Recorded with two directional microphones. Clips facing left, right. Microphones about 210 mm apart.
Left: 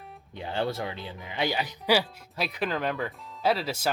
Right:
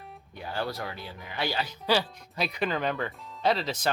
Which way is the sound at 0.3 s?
25° left (ahead or behind).